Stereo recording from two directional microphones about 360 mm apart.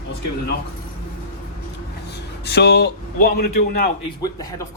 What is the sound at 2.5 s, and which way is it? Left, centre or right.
A man's voice, left.